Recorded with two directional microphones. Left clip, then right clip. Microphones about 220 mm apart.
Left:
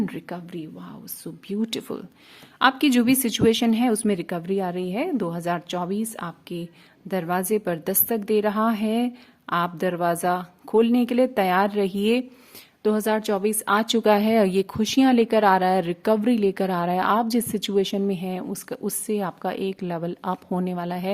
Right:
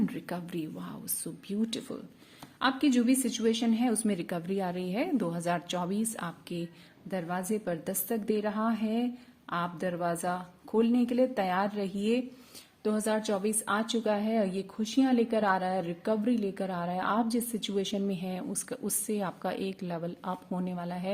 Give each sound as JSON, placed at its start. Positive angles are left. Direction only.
{"t": 0.0, "sound": "a sound", "side_deg": 30}
{"t": 0.3, "sound": "a woman's voice", "side_deg": 15}
{"t": 7.1, "sound": "a woman's voice", "side_deg": 35}